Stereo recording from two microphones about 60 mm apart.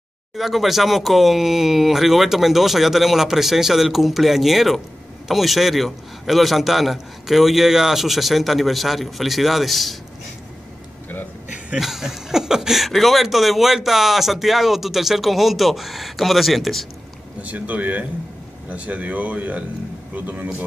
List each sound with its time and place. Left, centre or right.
0.4 s speech: centre
11.8 s speech: centre
17.4 s speech: right